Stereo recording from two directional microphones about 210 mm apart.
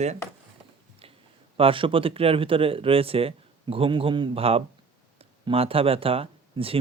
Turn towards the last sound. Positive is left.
turn(degrees=-25)  # may be behind; listen again after turning